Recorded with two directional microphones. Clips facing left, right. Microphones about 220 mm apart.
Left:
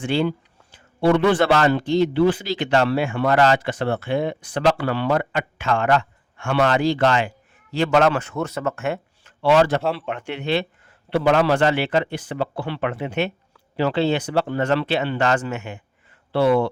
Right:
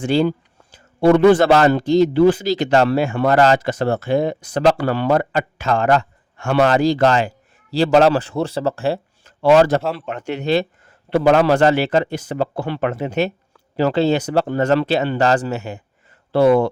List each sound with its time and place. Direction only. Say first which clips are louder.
0.0 s a man's voice: right 4 dB; 40° right (ahead or behind)